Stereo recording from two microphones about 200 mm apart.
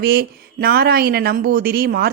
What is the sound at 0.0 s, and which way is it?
A woman's voice, 50° right (ahead or behind).